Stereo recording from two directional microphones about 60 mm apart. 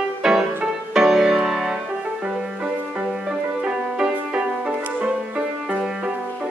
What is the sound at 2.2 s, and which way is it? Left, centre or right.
Music, centre.